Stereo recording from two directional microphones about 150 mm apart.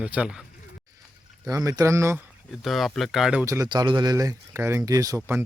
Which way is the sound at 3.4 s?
25° right (ahead or behind).